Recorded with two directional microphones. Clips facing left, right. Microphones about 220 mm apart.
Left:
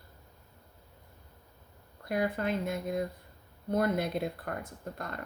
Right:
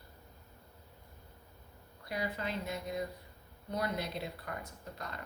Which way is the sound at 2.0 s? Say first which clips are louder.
Left 7 dB; 50° left (ahead or behind).